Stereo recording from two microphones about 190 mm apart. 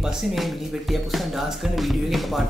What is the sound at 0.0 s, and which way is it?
Speech, centre (ahead or behind).